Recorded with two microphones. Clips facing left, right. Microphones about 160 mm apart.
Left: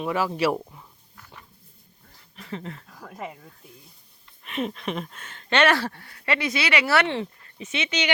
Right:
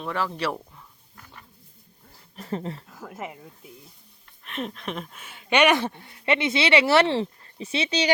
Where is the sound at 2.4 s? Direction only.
40° right (ahead or behind).